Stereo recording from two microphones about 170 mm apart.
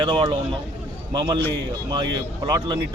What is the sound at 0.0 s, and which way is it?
Speech, 25° right (ahead or behind).